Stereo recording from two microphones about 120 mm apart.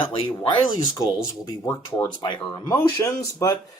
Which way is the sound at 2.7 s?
25° left (ahead or behind).